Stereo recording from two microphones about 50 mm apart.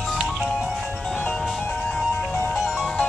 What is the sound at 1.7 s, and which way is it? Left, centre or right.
Music, centre.